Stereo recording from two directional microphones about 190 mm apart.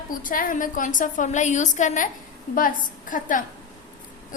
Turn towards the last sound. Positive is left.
turn(degrees=45)  # may be behind; listen again after turning